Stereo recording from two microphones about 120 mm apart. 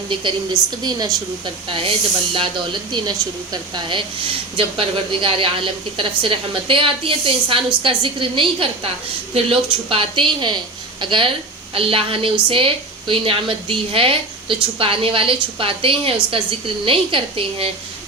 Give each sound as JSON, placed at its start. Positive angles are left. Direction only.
{"t": 0.1, "sound": "speech", "side_deg": -45}
{"t": 1.6, "sound": "a woman's voice", "side_deg": -45}